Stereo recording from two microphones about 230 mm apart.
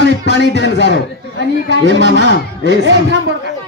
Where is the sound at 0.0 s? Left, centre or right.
Left.